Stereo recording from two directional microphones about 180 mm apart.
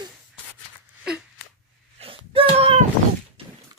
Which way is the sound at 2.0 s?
30° right (ahead or behind).